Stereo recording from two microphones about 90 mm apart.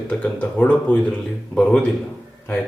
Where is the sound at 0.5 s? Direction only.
15° left (ahead or behind).